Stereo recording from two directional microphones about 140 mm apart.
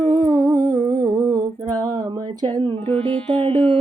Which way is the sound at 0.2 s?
70° right (ahead or behind).